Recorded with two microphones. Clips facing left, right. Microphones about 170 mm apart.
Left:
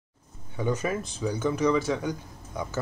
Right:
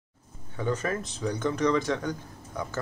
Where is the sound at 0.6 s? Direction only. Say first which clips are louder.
Left 1 dB; 10° left (ahead or behind).